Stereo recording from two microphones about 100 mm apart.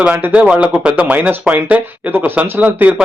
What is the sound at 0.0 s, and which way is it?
Speech, 15° right (ahead or behind).